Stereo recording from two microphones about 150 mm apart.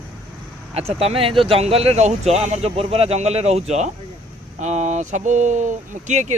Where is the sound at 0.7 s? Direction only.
40° right (ahead or behind).